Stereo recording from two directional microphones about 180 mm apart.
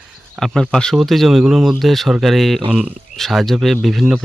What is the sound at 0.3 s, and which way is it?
A man's voice, 5° left (ahead or behind).